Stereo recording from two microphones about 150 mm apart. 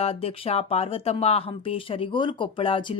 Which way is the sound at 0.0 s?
40° left (ahead or behind).